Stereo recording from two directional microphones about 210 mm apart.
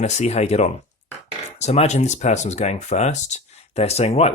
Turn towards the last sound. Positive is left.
turn(degrees=30)  # may be behind; listen again after turning